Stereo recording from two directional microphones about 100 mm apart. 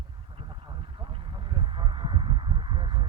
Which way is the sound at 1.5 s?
55° right (ahead or behind).